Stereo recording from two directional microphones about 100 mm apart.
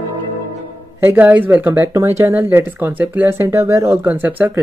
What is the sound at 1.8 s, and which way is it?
Speech, 30° right (ahead or behind).